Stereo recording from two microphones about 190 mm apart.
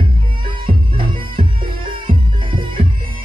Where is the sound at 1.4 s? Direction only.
25° right (ahead or behind).